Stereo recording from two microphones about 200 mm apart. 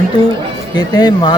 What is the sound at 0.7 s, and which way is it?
Speech, 20° left (ahead or behind).